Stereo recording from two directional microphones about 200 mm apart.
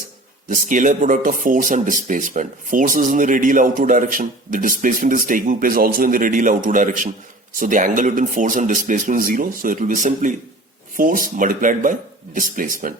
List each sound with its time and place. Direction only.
0.4 s speech: 40° right (ahead or behind)